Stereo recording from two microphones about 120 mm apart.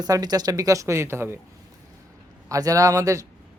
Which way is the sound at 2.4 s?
30° right (ahead or behind).